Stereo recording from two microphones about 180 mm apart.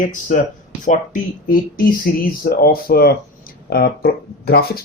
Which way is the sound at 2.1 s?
55° left (ahead or behind).